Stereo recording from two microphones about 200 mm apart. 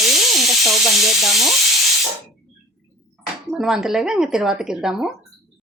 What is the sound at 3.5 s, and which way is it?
Sizzle, centre (ahead or behind).